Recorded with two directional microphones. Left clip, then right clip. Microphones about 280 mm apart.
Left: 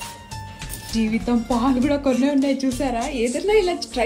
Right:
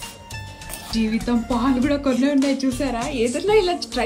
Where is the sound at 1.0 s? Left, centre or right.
Centre.